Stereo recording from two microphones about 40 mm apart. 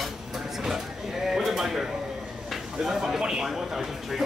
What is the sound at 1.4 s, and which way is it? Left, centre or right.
Speech, centre.